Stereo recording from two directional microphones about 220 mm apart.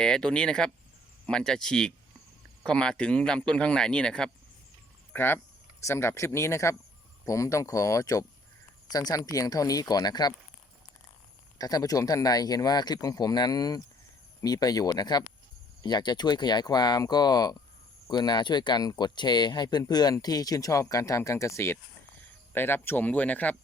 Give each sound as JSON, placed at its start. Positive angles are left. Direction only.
{"t": 0.0, "sound": "speech", "side_deg": 5}
{"t": 11.5, "sound": "speech", "side_deg": 15}